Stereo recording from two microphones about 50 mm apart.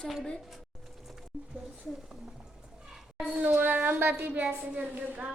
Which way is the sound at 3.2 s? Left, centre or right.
Right.